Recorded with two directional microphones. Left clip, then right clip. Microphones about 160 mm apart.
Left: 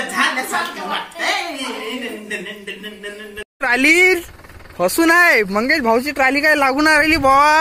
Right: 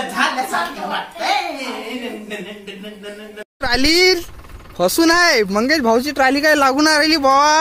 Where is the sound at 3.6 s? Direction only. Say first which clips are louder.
Left 2 dB; 15° right (ahead or behind).